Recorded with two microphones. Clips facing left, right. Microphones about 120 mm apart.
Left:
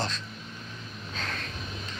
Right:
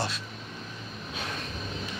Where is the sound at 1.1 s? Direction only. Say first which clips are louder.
Even; 15° right (ahead or behind).